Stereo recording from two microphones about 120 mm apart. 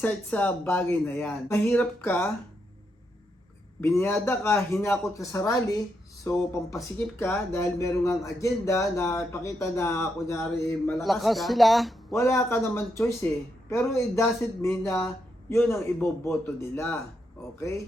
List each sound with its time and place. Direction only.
0.0 s speech: 10° left (ahead or behind)
3.8 s speech: 20° left (ahead or behind)
11.0 s speech: centre (ahead or behind)
12.1 s speech: 25° left (ahead or behind)